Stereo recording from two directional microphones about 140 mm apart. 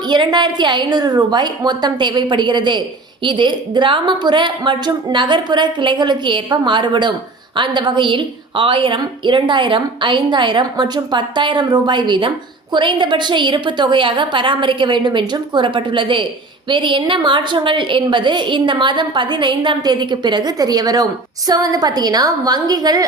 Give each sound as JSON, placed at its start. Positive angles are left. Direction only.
{"t": 0.1, "sound": "a woman's voice", "side_deg": -30}